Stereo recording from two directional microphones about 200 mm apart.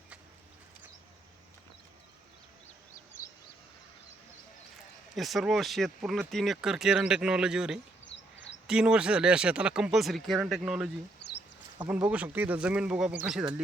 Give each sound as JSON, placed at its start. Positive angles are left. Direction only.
{"t": 5.1, "sound": "speech", "side_deg": 0}
{"t": 8.0, "sound": "a sound", "side_deg": 65}
{"t": 8.6, "sound": "speech", "side_deg": -5}